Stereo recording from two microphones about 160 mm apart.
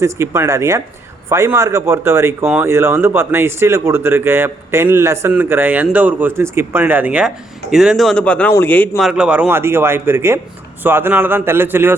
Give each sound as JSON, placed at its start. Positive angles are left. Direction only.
{"t": 0.0, "sound": "a man's voice", "side_deg": -15}
{"t": 9.0, "sound": "speech", "side_deg": -5}